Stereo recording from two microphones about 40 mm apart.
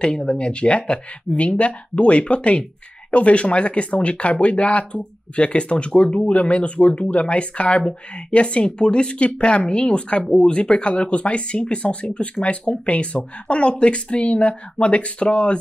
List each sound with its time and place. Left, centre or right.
0.0 s speech: left